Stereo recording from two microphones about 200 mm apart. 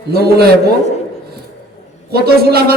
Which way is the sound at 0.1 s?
50° right (ahead or behind).